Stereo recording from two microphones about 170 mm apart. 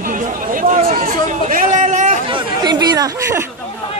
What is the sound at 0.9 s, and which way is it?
Chatter, 55° right (ahead or behind).